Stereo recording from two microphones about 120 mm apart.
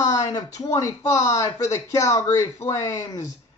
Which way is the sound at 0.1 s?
35° left (ahead or behind).